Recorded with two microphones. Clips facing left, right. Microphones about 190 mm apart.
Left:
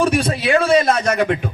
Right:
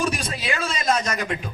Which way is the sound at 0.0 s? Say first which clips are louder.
Left 9 dB; 60° left (ahead or behind).